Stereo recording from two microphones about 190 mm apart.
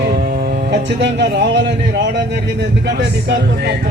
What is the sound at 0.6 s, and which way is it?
Speech, 65° right (ahead or behind).